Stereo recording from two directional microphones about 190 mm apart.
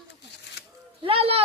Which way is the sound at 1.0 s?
30° right (ahead or behind).